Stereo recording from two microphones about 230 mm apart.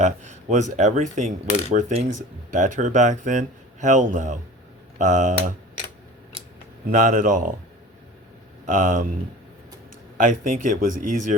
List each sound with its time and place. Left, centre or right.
0.0 s speech: right
6.8 s speech: right
8.6 s speech: right
10.2 s speech: right